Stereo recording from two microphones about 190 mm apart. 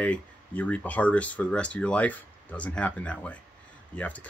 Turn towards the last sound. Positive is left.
turn(degrees=10)  # may be behind; listen again after turning